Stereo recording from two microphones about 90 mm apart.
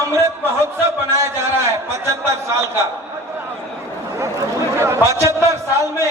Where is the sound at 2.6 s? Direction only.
30° right (ahead or behind).